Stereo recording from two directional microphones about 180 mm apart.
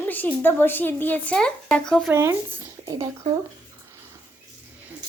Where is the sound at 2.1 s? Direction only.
15° right (ahead or behind).